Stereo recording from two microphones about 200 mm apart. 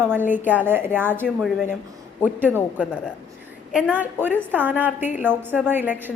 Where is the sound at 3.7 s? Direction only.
5° right (ahead or behind).